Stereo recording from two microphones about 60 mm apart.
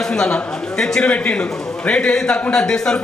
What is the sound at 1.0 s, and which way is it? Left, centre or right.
A man's voice, left.